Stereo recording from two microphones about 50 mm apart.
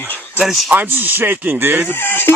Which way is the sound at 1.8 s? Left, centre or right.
Left.